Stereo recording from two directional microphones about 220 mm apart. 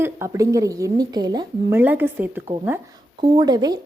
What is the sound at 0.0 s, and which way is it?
A woman's voice, 15° right (ahead or behind).